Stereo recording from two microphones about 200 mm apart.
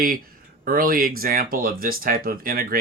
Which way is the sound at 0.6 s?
45° right (ahead or behind).